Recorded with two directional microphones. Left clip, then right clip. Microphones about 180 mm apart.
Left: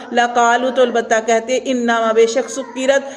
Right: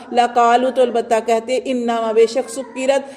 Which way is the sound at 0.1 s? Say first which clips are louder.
Even; 35° right (ahead or behind).